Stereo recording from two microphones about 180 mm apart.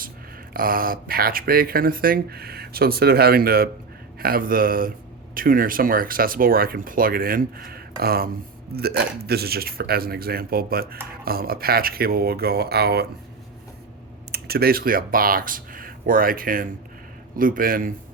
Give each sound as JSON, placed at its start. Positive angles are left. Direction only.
{"t": 0.5, "sound": "speech", "side_deg": -50}
{"t": 14.3, "sound": "speech", "side_deg": -60}